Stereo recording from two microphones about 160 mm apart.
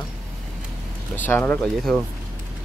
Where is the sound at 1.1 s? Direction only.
10° left (ahead or behind).